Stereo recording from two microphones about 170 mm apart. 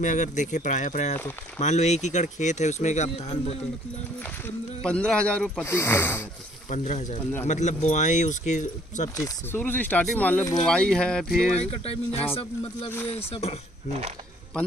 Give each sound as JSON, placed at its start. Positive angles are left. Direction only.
{"t": 0.0, "sound": "speech", "side_deg": 45}
{"t": 4.8, "sound": "speech", "side_deg": 5}
{"t": 6.7, "sound": "speech", "side_deg": 45}
{"t": 9.1, "sound": "speech", "side_deg": 15}
{"t": 11.5, "sound": "speech", "side_deg": 35}